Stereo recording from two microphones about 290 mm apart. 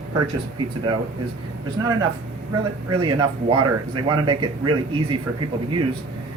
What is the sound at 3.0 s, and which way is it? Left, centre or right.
Speech, centre.